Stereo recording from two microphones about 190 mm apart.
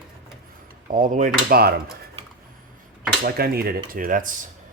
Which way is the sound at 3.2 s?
55° right (ahead or behind).